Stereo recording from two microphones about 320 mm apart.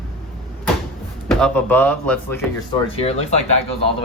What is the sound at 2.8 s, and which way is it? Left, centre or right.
Speech, centre.